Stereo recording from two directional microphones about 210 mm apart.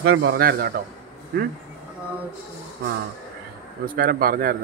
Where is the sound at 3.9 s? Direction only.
45° right (ahead or behind).